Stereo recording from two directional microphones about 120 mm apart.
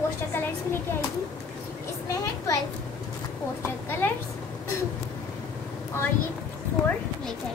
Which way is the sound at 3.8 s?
20° left (ahead or behind).